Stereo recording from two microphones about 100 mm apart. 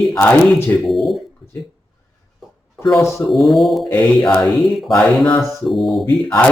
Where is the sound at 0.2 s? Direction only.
15° left (ahead or behind).